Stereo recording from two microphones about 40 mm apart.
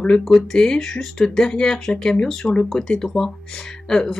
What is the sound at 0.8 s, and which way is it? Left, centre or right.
Speech, centre.